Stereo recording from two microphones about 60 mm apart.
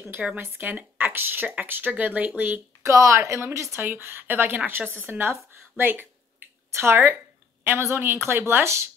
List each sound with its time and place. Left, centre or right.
0.4 s a woman's voice: right
2.8 s a woman's voice: right